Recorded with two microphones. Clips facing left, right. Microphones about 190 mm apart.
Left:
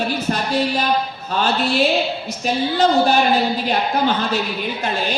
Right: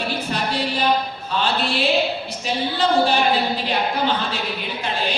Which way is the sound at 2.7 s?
45° left (ahead or behind).